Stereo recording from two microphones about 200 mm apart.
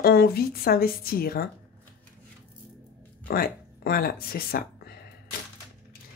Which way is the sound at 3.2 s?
50° left (ahead or behind).